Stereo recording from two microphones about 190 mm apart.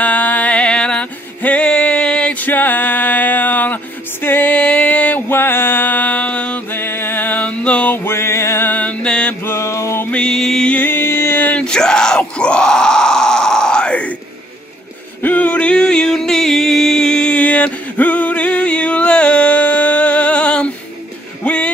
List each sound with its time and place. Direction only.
0.0 s music: 10° left (ahead or behind)
15.2 s music: 5° left (ahead or behind)
21.4 s a sound: 5° left (ahead or behind)